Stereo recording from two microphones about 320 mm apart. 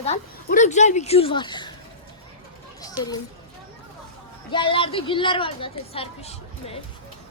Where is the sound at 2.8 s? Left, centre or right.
Centre.